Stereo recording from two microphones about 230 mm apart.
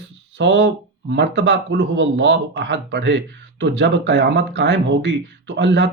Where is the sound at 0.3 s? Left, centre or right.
Right.